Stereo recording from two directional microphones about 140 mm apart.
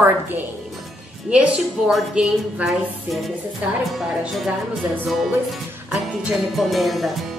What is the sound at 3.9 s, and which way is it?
Music, centre (ahead or behind).